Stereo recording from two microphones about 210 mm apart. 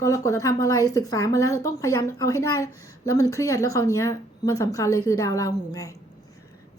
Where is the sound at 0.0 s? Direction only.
15° left (ahead or behind).